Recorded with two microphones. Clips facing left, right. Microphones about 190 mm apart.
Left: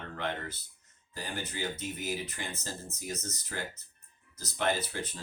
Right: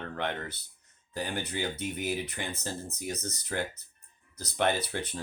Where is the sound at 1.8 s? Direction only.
60° right (ahead or behind).